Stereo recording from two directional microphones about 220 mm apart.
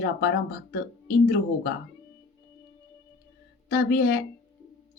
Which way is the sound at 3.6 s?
45° left (ahead or behind).